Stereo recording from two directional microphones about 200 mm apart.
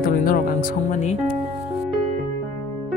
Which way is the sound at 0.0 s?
45° left (ahead or behind).